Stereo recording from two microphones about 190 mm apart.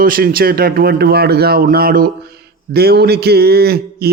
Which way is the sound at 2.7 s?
55° right (ahead or behind).